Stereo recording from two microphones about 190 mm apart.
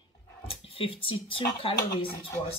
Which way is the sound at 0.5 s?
30° left (ahead or behind).